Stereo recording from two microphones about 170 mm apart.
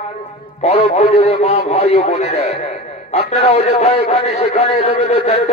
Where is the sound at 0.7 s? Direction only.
40° left (ahead or behind).